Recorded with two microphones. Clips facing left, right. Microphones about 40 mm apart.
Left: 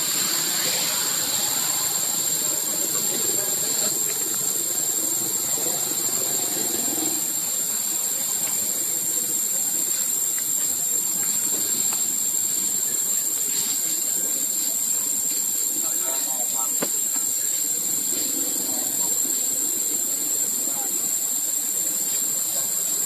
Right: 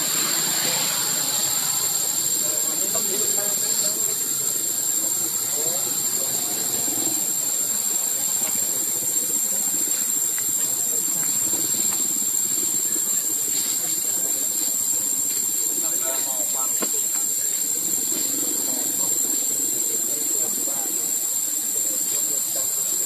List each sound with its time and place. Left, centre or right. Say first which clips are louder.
0.4 s vehicle: right 1 dB; centre
1.5 s vehicle: even; centre
3.0 s a sound: right 2 dB; centre
3.7 s helicopter: even; left
6.1 s helicopter: left 1 dB; left
6.9 s a sound: left 1 dB; left
18.3 s vehicle: right 1 dB; right